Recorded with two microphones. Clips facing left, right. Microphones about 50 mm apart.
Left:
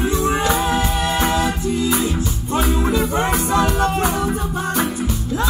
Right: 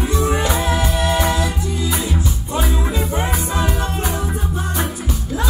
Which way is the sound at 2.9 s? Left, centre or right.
Left.